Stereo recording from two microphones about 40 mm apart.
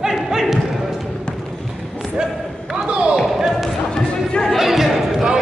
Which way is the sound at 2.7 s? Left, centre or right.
Right.